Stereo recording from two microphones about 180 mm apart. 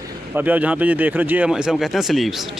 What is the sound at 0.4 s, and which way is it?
Speech, 10° right (ahead or behind).